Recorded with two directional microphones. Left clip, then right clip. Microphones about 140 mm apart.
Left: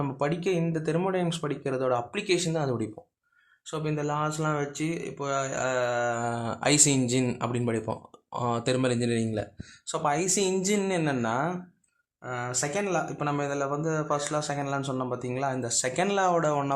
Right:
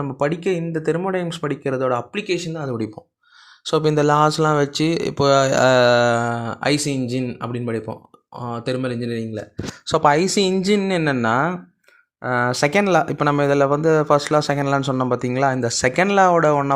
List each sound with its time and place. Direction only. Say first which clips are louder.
0.2 s speech: right 7 dB; 30° right (ahead or behind)
2.5 s speech: right 3 dB; 20° right (ahead or behind)
3.7 s speech: right 14 dB; 60° right (ahead or behind); by 9.5 s 15° right (ahead or behind)
9.8 s speech: right 11 dB; 45° right (ahead or behind)